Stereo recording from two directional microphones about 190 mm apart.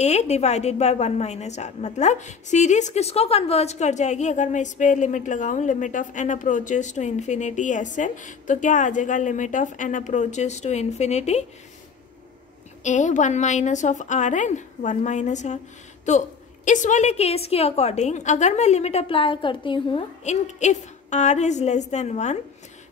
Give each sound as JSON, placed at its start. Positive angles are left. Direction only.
{"t": 0.0, "sound": "a woman's voice", "side_deg": 35}
{"t": 12.8, "sound": "a woman's voice", "side_deg": 40}